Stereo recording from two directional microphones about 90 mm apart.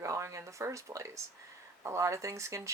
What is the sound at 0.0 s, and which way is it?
Speech, 35° right (ahead or behind).